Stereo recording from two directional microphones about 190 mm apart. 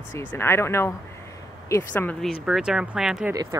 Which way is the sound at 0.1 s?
10° left (ahead or behind).